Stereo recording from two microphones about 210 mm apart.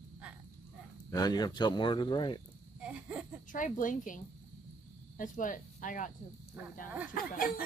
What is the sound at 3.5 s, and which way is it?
Speech, 40° left (ahead or behind).